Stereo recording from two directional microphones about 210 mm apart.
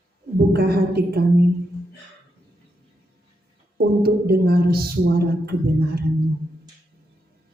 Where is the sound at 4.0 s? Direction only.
45° right (ahead or behind).